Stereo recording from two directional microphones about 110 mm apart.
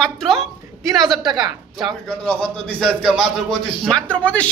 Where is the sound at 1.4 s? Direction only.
45° right (ahead or behind).